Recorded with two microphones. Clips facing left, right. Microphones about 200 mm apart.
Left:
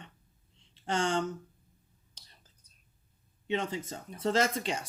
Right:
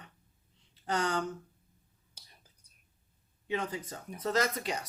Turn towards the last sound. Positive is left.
turn(degrees=25)  # may be behind; listen again after turning